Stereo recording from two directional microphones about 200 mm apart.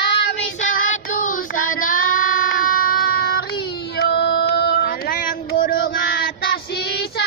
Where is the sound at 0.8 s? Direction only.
40° left (ahead or behind).